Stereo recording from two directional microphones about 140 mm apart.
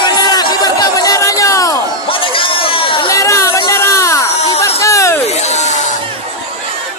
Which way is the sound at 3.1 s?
20° left (ahead or behind).